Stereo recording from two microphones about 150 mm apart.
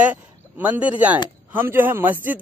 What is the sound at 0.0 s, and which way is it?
Speech, 10° right (ahead or behind).